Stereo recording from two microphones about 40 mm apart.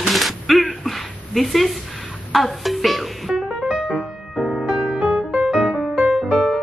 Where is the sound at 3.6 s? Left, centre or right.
Right.